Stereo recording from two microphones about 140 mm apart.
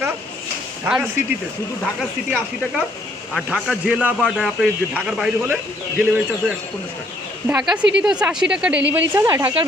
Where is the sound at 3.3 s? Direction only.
Centre (ahead or behind).